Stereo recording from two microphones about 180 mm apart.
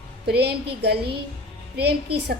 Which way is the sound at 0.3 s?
65° right (ahead or behind).